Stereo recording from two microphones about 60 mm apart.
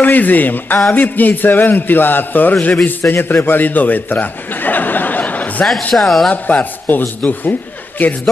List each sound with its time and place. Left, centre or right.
0.0 s a man's voice: left
5.9 s speech: centre
6.3 s a man's voice: left